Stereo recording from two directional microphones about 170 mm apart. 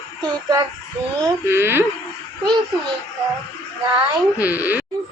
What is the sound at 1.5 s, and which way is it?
Speech, 15° right (ahead or behind).